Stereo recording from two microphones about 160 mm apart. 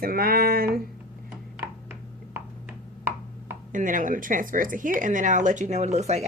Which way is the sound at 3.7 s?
55° right (ahead or behind).